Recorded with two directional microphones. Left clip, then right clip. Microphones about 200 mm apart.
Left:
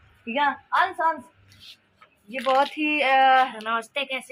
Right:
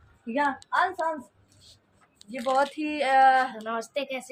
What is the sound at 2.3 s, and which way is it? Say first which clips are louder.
Speech: left 3 dB; 5° left (ahead or behind).